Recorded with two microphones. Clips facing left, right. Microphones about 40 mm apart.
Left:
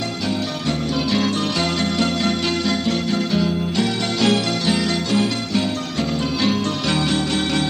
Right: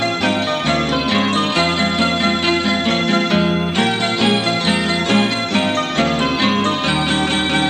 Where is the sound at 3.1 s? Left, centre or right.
Right.